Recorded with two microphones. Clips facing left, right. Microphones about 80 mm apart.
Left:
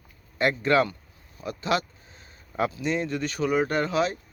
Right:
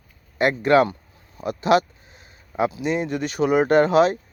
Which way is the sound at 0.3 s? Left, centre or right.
Right.